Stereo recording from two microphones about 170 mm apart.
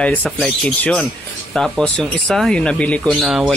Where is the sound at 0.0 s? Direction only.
5° left (ahead or behind).